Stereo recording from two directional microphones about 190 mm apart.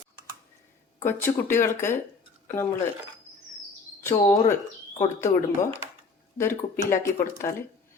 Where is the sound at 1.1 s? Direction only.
10° left (ahead or behind).